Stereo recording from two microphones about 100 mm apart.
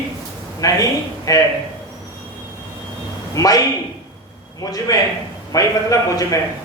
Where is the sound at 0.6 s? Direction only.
35° left (ahead or behind).